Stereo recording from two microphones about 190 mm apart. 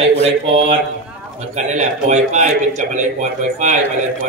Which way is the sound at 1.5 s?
40° right (ahead or behind).